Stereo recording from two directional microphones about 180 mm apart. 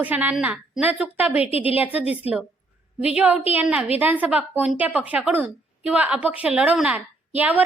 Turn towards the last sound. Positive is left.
turn(degrees=-10)  # may be behind; listen again after turning